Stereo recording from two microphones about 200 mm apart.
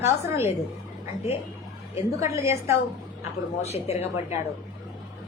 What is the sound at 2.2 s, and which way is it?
Speech, 15° right (ahead or behind).